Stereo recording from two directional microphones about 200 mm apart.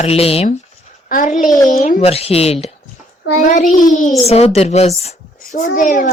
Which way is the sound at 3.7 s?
40° left (ahead or behind).